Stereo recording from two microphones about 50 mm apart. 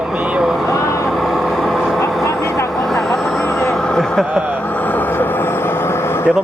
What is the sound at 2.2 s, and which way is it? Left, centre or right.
Vehicle, left.